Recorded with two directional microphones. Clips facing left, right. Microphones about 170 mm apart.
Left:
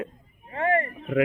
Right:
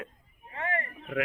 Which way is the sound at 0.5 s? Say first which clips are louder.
Left 10 dB; 45° left (ahead or behind).